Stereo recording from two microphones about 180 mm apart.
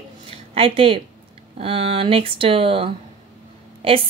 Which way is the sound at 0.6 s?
30° right (ahead or behind).